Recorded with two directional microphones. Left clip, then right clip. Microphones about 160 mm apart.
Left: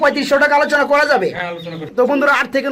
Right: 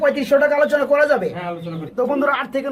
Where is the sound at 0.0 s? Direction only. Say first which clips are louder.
Left 2 dB; 25° left (ahead or behind).